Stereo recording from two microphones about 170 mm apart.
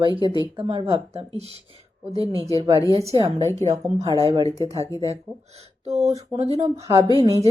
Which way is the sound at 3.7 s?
40° right (ahead or behind).